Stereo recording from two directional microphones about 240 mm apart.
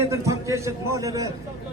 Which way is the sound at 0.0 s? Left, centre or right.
Centre.